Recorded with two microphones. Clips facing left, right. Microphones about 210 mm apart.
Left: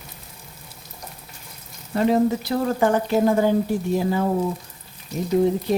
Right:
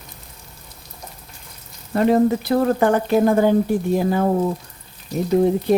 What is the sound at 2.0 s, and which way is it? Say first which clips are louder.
Speech: right 3 dB; 55° right (ahead or behind).